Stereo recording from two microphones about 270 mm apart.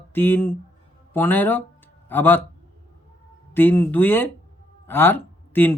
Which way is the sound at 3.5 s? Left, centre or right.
Centre.